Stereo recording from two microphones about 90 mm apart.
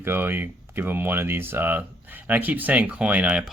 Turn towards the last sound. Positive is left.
turn(degrees=-15)  # may be behind; listen again after turning